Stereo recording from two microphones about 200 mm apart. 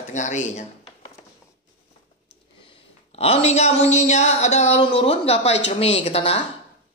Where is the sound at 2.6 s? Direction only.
25° left (ahead or behind).